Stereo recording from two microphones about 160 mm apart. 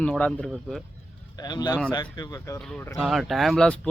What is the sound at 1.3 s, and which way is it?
Speech, 25° left (ahead or behind).